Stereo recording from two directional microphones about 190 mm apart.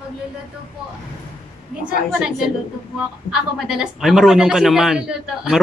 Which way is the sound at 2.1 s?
5° right (ahead or behind).